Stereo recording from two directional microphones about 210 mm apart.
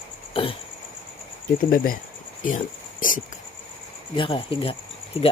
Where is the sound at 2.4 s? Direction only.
40° left (ahead or behind).